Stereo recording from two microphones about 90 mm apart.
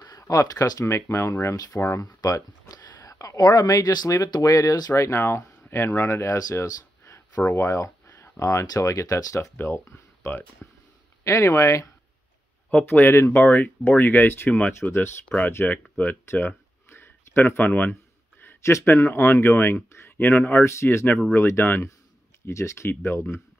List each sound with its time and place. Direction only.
0.2 s speech: 40° left (ahead or behind)
12.7 s speech: 20° left (ahead or behind)
15.2 s speech: 15° left (ahead or behind)